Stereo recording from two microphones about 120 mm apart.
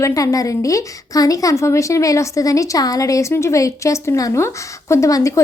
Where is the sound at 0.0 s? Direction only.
25° left (ahead or behind).